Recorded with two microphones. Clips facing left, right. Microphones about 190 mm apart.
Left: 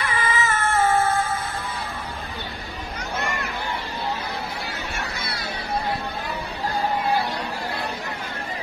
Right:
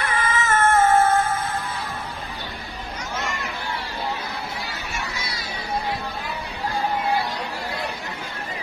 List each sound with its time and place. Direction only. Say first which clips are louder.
0.0 s cat: even; 50° right (ahead or behind)
5.0 s crowd: left 1 dB; 60° left (ahead or behind)